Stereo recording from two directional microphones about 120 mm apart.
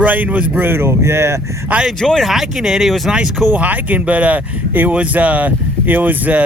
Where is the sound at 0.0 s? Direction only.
15° right (ahead or behind).